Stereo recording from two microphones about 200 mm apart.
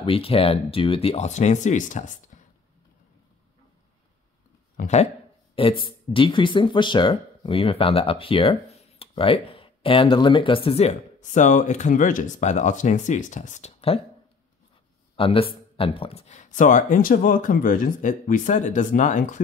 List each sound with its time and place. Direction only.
0.0 s speech: 30° left (ahead or behind)
4.7 s speech: 35° left (ahead or behind)
15.1 s speech: 25° left (ahead or behind)